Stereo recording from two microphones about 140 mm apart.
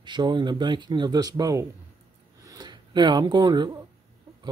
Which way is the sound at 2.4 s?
30° right (ahead or behind).